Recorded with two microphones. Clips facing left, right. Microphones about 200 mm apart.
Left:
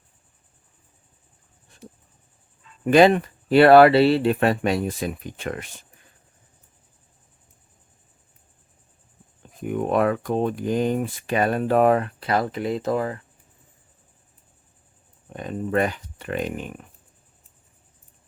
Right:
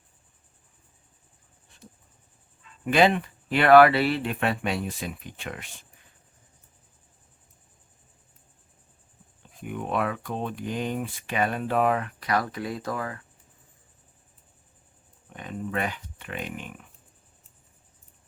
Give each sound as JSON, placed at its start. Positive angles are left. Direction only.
{"t": 2.8, "sound": "speech", "side_deg": 40}
{"t": 9.4, "sound": "speech", "side_deg": 45}
{"t": 15.3, "sound": "speech", "side_deg": 40}